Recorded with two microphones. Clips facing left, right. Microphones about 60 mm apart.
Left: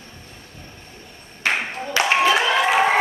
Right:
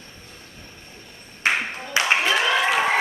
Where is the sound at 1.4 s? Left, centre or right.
Right.